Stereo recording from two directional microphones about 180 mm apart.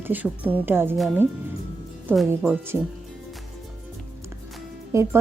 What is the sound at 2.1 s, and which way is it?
Speech, 10° right (ahead or behind).